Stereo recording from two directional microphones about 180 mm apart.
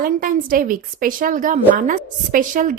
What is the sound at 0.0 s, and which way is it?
A woman's voice, 50° right (ahead or behind).